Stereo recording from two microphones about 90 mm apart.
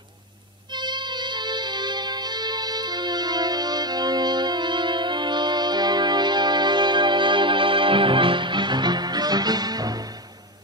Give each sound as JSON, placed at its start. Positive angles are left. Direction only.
{"t": 0.7, "sound": "music", "side_deg": -55}